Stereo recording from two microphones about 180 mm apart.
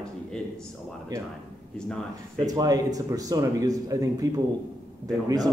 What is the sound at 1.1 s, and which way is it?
Speech, 20° right (ahead or behind).